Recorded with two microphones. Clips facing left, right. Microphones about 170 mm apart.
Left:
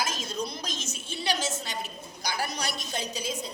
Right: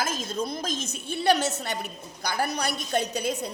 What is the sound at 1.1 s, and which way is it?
A woman's voice, 60° right (ahead or behind).